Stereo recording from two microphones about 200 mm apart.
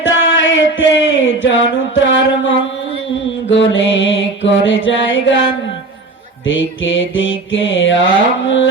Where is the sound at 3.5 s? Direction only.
70° left (ahead or behind).